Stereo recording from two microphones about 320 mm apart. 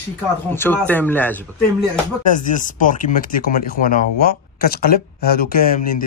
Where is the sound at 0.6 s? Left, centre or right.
Centre.